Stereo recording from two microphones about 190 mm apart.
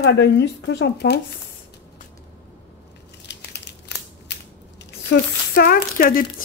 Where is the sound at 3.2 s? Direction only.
65° left (ahead or behind).